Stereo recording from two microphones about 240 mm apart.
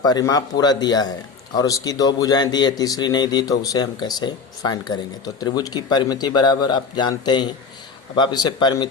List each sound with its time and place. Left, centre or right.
0.0 s speech: centre